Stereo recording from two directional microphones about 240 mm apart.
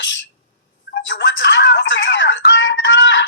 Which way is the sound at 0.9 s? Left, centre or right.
Left.